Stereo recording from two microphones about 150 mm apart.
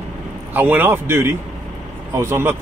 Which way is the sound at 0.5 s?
15° right (ahead or behind).